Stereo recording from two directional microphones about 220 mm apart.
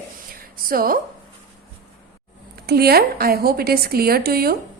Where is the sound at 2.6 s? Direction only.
45° right (ahead or behind).